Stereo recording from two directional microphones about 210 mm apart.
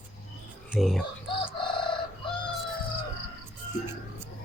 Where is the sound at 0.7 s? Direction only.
Centre (ahead or behind).